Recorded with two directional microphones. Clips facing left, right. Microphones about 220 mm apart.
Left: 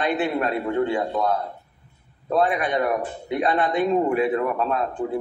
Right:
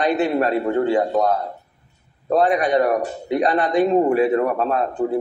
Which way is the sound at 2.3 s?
40° right (ahead or behind).